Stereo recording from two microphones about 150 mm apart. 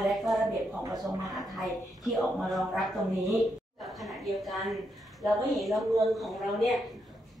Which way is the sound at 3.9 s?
Centre (ahead or behind).